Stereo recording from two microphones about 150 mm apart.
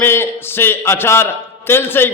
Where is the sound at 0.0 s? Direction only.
15° left (ahead or behind).